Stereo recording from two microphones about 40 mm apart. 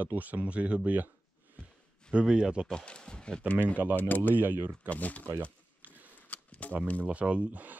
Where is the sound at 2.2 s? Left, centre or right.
Right.